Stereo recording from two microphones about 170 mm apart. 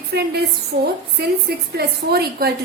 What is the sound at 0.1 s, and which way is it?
Speech, 70° right (ahead or behind).